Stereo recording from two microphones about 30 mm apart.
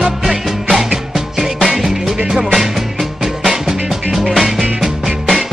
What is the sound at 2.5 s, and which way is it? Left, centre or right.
Music, centre.